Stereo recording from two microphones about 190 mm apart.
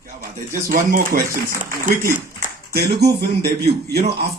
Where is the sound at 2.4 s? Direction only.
55° right (ahead or behind).